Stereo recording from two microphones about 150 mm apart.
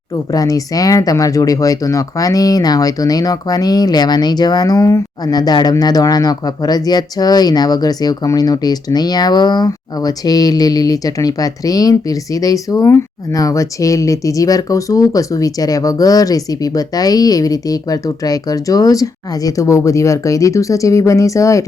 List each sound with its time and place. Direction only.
0.3 s speech: 25° left (ahead or behind)